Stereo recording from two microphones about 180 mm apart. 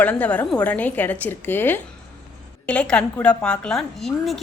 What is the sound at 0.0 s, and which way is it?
A woman's voice, 10° left (ahead or behind).